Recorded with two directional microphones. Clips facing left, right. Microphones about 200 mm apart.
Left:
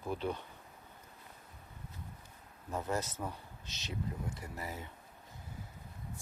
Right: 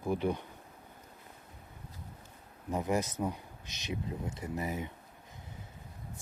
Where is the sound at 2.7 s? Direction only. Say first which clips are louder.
Right 5 dB; 15° right (ahead or behind).